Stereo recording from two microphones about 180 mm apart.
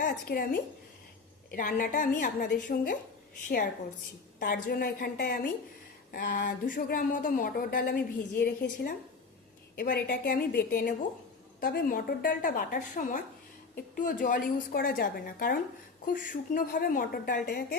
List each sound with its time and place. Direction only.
0.0 s speech: 55° left (ahead or behind)
4.4 s a woman's voice: 55° left (ahead or behind)
17.4 s a woman's voice: 65° left (ahead or behind)